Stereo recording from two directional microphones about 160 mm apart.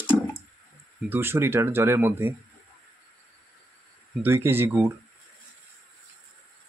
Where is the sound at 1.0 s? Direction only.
15° right (ahead or behind).